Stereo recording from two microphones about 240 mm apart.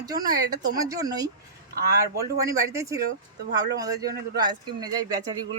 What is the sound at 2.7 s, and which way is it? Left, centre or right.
Speech, centre.